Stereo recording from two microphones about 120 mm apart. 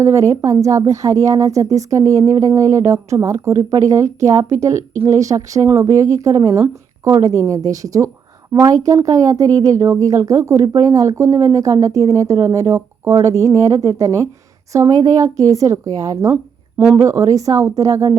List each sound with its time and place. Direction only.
0.0 s speech: 25° right (ahead or behind)
16.3 s a sound: 15° right (ahead or behind)
17.0 s speech: 25° right (ahead or behind)